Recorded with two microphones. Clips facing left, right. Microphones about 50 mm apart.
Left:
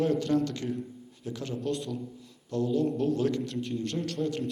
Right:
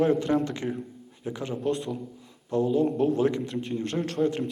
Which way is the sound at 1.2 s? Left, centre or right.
Right.